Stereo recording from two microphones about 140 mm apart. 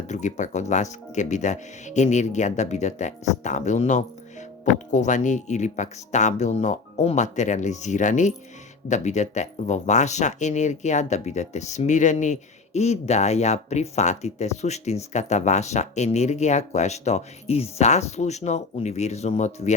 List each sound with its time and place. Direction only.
0.1 s speech: 60° left (ahead or behind)